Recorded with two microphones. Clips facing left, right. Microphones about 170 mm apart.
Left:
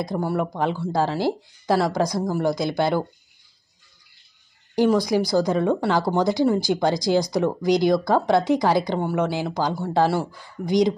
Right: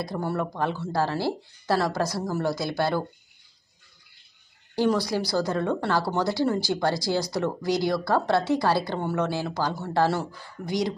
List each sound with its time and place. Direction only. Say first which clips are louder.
0.0 s speech: left 4 dB; 15° left (ahead or behind)
4.7 s speech: left 5 dB; 15° left (ahead or behind)